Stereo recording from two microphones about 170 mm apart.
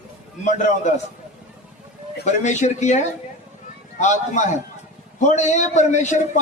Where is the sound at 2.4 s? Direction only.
45° left (ahead or behind).